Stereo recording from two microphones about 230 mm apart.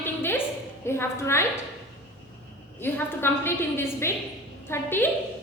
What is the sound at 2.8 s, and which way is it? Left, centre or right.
A woman's voice, centre.